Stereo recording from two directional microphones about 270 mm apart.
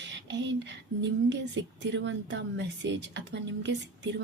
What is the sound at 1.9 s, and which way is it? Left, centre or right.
A woman's voice, right.